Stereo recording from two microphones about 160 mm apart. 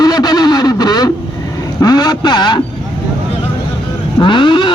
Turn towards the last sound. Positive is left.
turn(degrees=30)  # may be behind; listen again after turning